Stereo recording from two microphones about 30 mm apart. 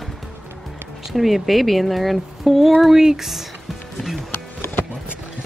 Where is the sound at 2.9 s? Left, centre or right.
Right.